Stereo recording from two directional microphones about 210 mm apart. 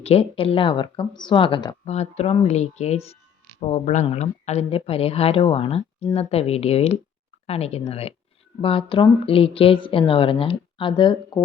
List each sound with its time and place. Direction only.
0.0 s speech: 30° left (ahead or behind)